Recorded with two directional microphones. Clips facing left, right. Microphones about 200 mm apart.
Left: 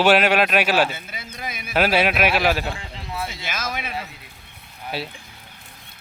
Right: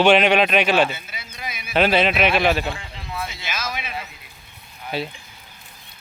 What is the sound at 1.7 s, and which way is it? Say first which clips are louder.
Speech: right 1 dB; 10° left (ahead or behind).